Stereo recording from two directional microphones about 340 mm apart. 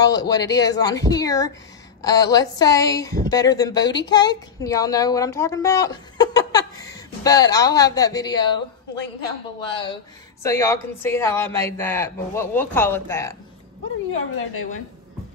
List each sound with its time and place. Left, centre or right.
0.0 s a woman's voice: centre
9.6 s a woman's voice: centre
14.1 s a woman's voice: left